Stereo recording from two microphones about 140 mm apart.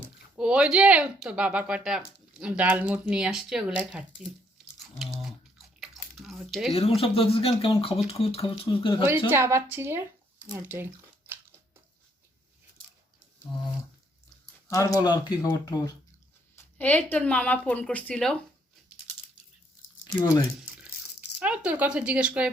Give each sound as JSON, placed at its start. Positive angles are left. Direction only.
{"t": 0.3, "sound": "speech", "side_deg": -5}
{"t": 4.8, "sound": "a sound", "side_deg": 0}
{"t": 7.0, "sound": "speech", "side_deg": 40}
{"t": 9.3, "sound": "speech", "side_deg": -20}
{"t": 14.7, "sound": "speech", "side_deg": 20}
{"t": 16.7, "sound": "speech", "side_deg": 10}
{"t": 20.6, "sound": "a sound", "side_deg": -5}